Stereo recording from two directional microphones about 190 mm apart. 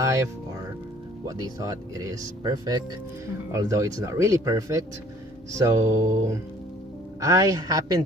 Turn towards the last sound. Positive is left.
turn(degrees=-20)  # may be behind; listen again after turning